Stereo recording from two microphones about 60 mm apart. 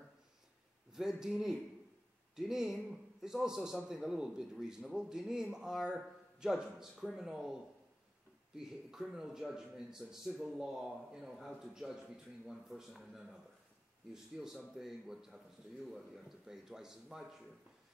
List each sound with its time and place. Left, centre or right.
0.9 s a man's voice: centre
8.5 s a man's voice: centre